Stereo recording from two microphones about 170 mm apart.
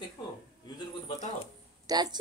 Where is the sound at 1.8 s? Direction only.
25° right (ahead or behind).